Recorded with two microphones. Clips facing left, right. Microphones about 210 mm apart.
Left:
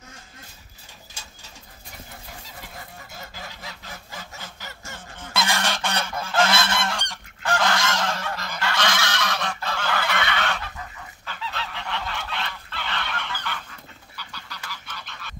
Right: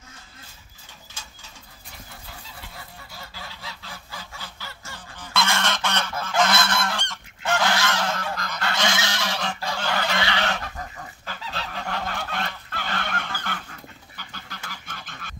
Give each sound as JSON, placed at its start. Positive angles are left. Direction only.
{"t": 5.1, "sound": "goose", "side_deg": 20}
{"t": 7.4, "sound": "goose", "side_deg": -5}
{"t": 8.7, "sound": "goose", "side_deg": -25}
{"t": 10.5, "sound": "goose", "side_deg": -40}